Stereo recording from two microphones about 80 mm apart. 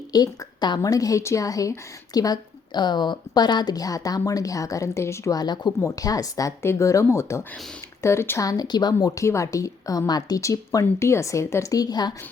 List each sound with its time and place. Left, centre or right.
0.1 s a woman's voice: left
0.8 s a woman's voice: left
5.3 s a woman's voice: left
6.6 s speech: left
8.4 s a woman's voice: left
9.1 s speech: left